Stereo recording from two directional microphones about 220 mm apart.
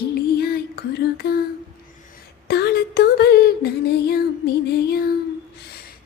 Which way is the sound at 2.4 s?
45° left (ahead or behind).